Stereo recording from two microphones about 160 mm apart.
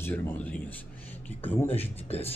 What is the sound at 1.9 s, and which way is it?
Speech, 40° left (ahead or behind).